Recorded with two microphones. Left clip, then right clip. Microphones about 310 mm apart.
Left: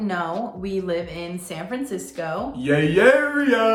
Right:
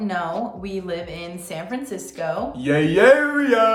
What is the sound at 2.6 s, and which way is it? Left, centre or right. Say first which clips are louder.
Speech: right 1 dB; centre.